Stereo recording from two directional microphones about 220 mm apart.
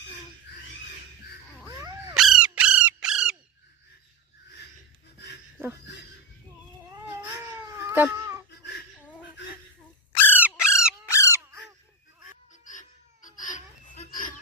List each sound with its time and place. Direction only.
2.1 s crow: centre (ahead or behind)
7.9 s cat: 10° right (ahead or behind)
10.2 s squawk: 10° left (ahead or behind)
11.1 s crow: 15° left (ahead or behind)
13.2 s a sound: 35° left (ahead or behind)